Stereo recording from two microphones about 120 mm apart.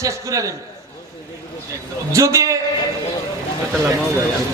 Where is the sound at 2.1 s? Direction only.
25° right (ahead or behind).